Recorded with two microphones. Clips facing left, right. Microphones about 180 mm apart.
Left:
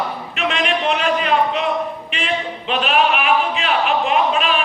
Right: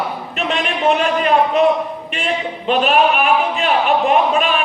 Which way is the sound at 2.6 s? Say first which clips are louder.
Right 4 dB; 45° right (ahead or behind).